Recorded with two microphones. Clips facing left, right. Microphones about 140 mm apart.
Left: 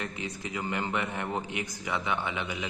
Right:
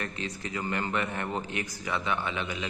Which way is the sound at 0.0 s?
15° left (ahead or behind).